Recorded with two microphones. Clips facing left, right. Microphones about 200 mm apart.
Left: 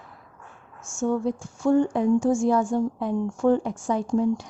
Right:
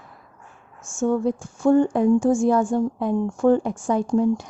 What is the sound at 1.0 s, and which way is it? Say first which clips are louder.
Speech: right 3 dB; 50° right (ahead or behind).